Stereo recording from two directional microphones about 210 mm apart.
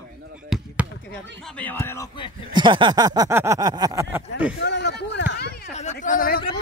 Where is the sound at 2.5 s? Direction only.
20° right (ahead or behind).